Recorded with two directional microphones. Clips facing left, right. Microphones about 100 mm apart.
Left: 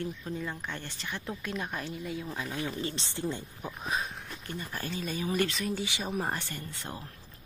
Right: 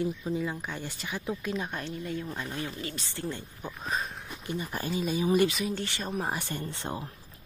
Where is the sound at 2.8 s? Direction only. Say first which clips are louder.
Left 2 dB; 25° left (ahead or behind).